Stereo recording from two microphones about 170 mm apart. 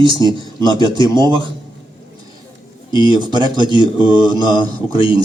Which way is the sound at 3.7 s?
25° left (ahead or behind).